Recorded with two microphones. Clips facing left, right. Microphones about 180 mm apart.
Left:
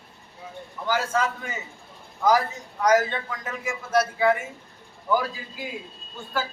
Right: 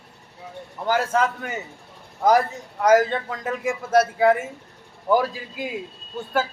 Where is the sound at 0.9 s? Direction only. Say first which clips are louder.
Right 4 dB; 65° right (ahead or behind).